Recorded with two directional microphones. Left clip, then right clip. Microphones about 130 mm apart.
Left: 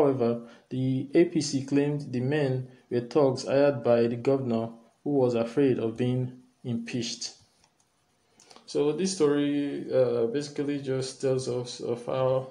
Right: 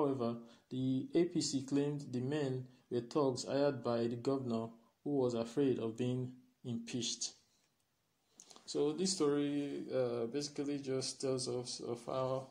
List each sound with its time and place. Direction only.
0.0 s speech: 15° right (ahead or behind)
8.7 s speech: 40° right (ahead or behind)